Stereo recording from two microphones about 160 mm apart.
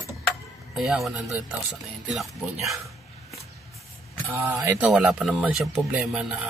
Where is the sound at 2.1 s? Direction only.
Centre (ahead or behind).